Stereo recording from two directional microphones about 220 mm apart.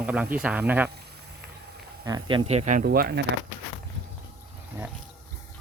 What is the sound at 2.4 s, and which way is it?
Speech, 30° right (ahead or behind).